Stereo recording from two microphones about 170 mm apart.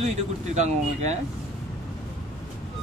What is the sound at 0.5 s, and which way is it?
Speech, 40° right (ahead or behind).